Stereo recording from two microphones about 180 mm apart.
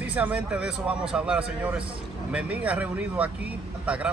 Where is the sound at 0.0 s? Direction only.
10° right (ahead or behind).